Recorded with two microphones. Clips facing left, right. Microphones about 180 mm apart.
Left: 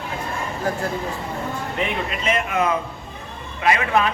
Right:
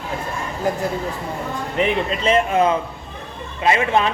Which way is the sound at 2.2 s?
30° right (ahead or behind).